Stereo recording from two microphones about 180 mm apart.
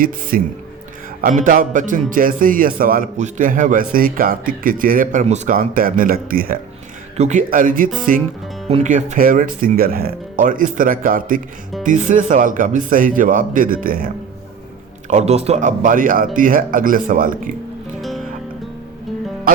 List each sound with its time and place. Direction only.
0.0 s a man's voice: 50° right (ahead or behind)
7.2 s a man's voice: 40° right (ahead or behind)
15.0 s a man's voice: 40° right (ahead or behind)